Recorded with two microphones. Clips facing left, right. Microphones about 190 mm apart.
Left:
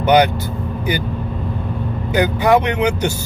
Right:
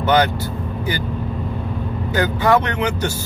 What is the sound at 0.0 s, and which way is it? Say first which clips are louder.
Speech: left 3 dB; 15° left (ahead or behind).